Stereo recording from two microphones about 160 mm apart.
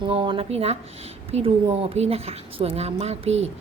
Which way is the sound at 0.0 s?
30° right (ahead or behind).